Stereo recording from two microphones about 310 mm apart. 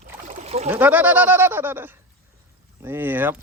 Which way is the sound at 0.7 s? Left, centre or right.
Centre.